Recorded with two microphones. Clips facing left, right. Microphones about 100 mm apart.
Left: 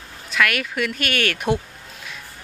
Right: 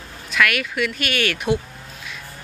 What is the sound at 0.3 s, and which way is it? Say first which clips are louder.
Speech: right 1 dB; 35° left (ahead or behind).